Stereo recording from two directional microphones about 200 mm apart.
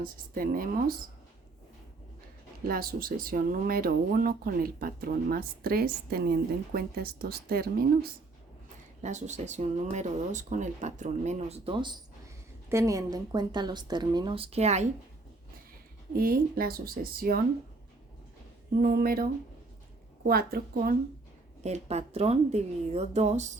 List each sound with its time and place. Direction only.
0.0 s speech: 45° right (ahead or behind)
2.6 s speech: 45° right (ahead or behind)
9.0 s a woman's voice: 35° right (ahead or behind)
16.1 s speech: 50° right (ahead or behind)
18.8 s speech: 45° right (ahead or behind)
21.6 s speech: 35° right (ahead or behind)